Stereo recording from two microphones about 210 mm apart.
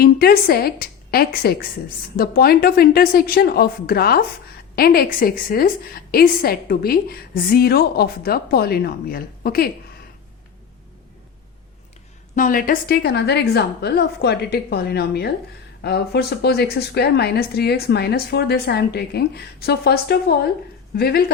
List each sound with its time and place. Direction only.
0.0 s a woman's voice: 50° left (ahead or behind)
12.4 s a woman's voice: 40° left (ahead or behind)